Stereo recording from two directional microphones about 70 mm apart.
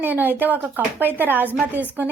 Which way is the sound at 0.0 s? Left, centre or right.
Right.